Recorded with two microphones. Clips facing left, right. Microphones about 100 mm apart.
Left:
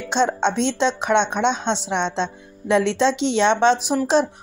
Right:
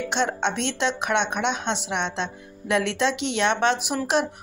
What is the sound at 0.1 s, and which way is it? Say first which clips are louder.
Speech: left 7 dB; 30° left (ahead or behind).